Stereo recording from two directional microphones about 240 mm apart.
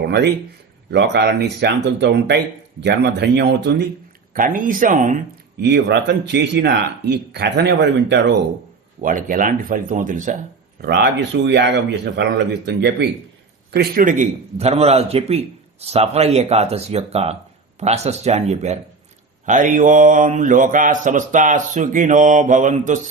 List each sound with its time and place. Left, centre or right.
0.9 s speech: right
4.4 s speech: right
9.0 s mantra: right
10.8 s a man's voice: right
19.5 s mantra: right